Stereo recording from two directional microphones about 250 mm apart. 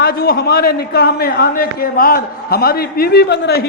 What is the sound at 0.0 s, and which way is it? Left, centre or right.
A man's voice, left.